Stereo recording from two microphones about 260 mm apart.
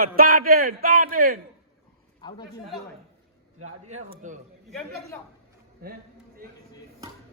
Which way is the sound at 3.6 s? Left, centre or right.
Right.